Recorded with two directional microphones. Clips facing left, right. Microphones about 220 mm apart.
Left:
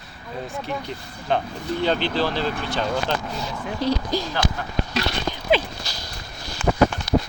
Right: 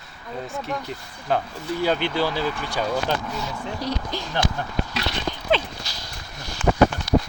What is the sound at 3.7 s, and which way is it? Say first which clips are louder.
Speech: left 7 dB; 30° left (ahead or behind).